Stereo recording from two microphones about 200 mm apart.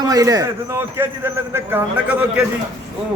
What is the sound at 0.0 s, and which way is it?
A man's voice, 20° right (ahead or behind).